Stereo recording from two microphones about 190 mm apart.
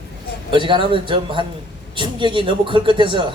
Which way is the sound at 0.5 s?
25° right (ahead or behind).